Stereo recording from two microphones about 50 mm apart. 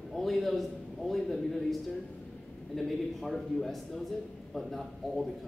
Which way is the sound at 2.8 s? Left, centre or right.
Centre.